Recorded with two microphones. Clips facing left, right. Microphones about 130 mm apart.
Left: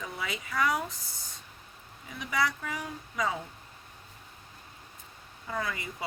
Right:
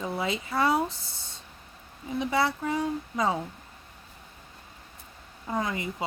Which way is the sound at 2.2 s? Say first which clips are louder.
Right 4 dB; 30° right (ahead or behind).